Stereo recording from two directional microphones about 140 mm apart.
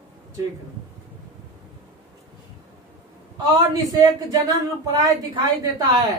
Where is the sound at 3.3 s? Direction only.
30° right (ahead or behind).